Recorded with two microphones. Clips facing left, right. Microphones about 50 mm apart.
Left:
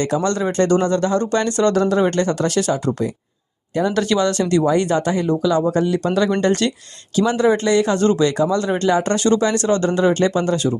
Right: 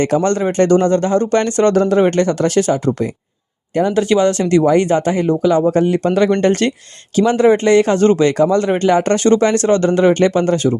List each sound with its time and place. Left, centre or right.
0.0 s speech: right
3.9 s speech: right